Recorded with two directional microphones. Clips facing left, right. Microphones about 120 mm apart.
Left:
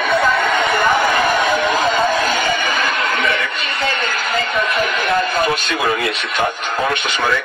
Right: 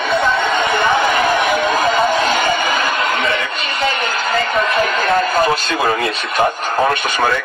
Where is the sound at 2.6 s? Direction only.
40° right (ahead or behind).